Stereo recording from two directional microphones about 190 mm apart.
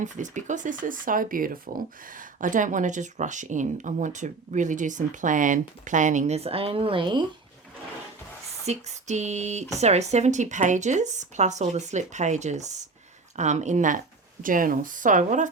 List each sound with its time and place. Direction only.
0.0 s speech: 40° right (ahead or behind); by 7.3 s 25° right (ahead or behind)
8.6 s speech: 35° right (ahead or behind)